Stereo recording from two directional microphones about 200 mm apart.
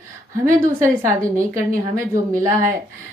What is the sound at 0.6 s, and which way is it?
Speech, 15° right (ahead or behind).